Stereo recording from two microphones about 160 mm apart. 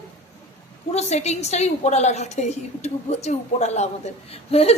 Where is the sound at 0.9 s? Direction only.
45° left (ahead or behind).